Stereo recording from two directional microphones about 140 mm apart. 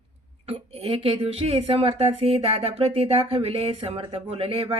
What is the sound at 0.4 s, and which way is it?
Speech, 45° right (ahead or behind).